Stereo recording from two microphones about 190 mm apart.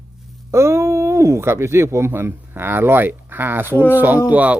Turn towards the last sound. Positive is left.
turn(degrees=-10)  # may be behind; listen again after turning